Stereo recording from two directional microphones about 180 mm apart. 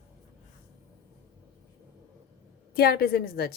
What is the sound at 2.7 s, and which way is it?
Speech, 60° left (ahead or behind).